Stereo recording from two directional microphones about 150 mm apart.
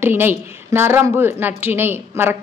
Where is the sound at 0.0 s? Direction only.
15° right (ahead or behind).